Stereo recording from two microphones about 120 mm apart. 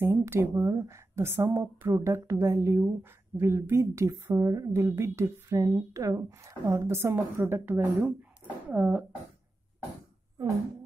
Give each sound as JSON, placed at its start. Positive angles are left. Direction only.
{"t": 0.0, "sound": "speech", "side_deg": -20}